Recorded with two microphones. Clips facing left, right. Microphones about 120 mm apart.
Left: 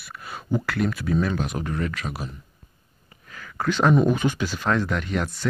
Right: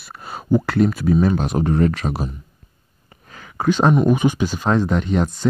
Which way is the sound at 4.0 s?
15° right (ahead or behind).